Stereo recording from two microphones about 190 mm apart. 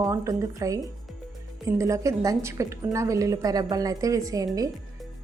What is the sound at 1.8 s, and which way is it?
A woman's voice, 15° right (ahead or behind).